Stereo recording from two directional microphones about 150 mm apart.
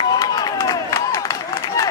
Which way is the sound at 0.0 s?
25° left (ahead or behind).